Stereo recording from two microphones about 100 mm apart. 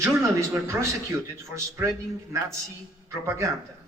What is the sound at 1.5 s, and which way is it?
Speech, 30° right (ahead or behind).